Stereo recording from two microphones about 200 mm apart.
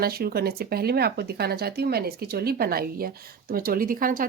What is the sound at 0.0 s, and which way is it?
Speech, 50° right (ahead or behind).